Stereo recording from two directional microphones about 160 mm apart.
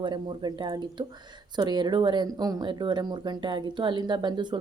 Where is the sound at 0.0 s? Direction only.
30° right (ahead or behind).